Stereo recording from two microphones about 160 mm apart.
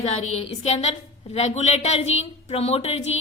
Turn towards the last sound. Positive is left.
turn(degrees=40)  # may be behind; listen again after turning